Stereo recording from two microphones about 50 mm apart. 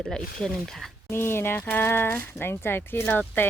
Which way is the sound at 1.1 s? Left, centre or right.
Left.